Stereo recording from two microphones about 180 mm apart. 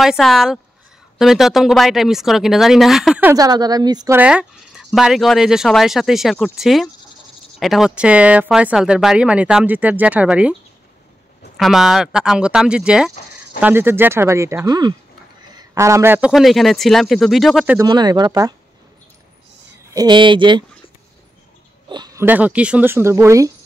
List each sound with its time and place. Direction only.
0.0 s speech: centre (ahead or behind)
3.3 s speech: 20° right (ahead or behind)
4.2 s speech: 5° right (ahead or behind)
11.5 s a man's voice: centre (ahead or behind)
16.3 s speech: centre (ahead or behind)
17.7 s speech: 20° right (ahead or behind)
19.9 s speech: 25° right (ahead or behind)
21.8 s a sound: 25° right (ahead or behind)
22.2 s speech: 10° right (ahead or behind)